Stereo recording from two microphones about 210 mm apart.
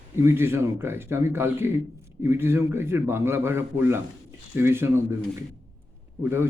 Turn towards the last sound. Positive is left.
turn(degrees=-10)  # may be behind; listen again after turning